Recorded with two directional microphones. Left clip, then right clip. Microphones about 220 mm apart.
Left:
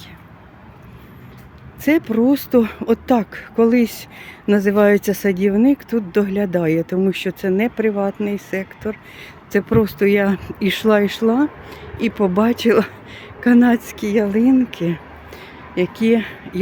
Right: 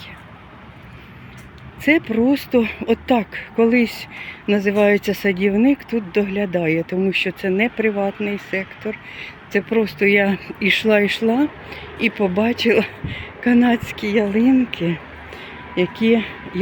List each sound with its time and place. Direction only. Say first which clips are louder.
1.8 s speech: even; 15° left (ahead or behind)
4.7 s speech: left 1 dB; 20° left (ahead or behind)
6.1 s speech: left 1 dB; 25° left (ahead or behind)
9.6 s speech: left 2 dB; 25° left (ahead or behind); by 16.6 s 5° left (ahead or behind)